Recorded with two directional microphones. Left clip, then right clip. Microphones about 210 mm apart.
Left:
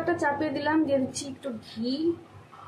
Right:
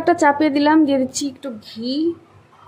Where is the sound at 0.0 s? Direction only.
45° right (ahead or behind).